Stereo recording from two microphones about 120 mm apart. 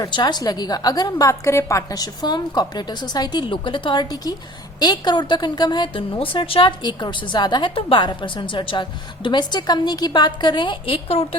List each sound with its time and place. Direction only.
0.0 s a woman's voice: 40° left (ahead or behind); by 11.3 s 55° left (ahead or behind)